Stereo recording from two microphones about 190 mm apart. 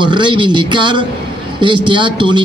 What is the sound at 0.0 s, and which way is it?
A man's voice, 25° right (ahead or behind).